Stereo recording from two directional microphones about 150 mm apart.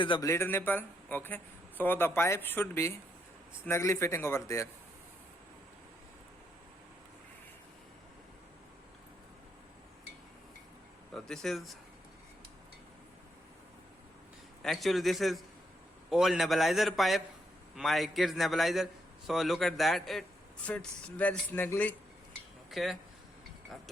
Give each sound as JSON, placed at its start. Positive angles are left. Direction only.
{"t": 0.0, "sound": "a man's voice", "side_deg": 35}
{"t": 0.3, "sound": "speech", "side_deg": 15}
{"t": 11.1, "sound": "speech", "side_deg": 0}
{"t": 14.6, "sound": "a man's voice", "side_deg": 0}
{"t": 22.7, "sound": "a man's voice", "side_deg": 0}